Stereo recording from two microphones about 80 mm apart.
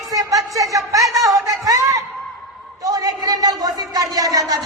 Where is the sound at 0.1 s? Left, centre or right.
Right.